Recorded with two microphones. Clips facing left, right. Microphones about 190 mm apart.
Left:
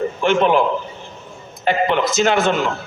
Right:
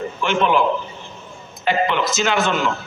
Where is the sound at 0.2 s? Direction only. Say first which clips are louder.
Left 3 dB; 50° left (ahead or behind).